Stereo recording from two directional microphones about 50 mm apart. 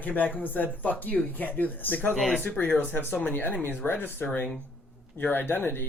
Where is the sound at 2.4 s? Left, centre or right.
Left.